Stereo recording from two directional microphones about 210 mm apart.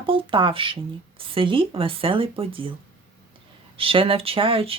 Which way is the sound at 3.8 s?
25° right (ahead or behind).